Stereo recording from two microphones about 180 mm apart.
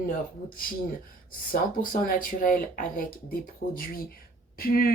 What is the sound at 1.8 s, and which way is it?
Speech, 50° left (ahead or behind).